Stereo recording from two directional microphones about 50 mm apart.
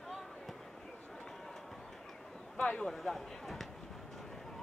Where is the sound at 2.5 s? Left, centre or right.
Left.